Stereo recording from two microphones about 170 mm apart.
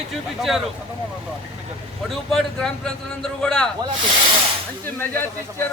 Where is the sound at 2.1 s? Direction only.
Centre (ahead or behind).